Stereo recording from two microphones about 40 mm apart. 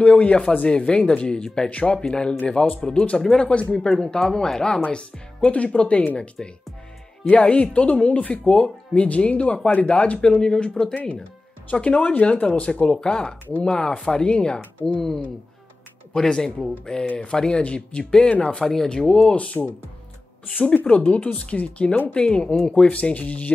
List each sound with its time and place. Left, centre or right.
0.0 s speech: left
3.2 s speech: centre
4.8 s speech: left
10.4 s speech: centre
12.8 s speech: left
14.6 s speech: left
15.0 s speech: centre
19.3 s speech: left
22.1 s speech: left
22.8 s speech: left